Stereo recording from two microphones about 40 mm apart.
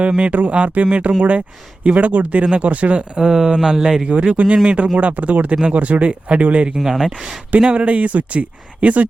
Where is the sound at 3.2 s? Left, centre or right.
Centre.